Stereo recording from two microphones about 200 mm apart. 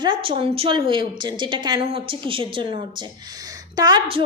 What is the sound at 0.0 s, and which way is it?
Female singing, 25° right (ahead or behind).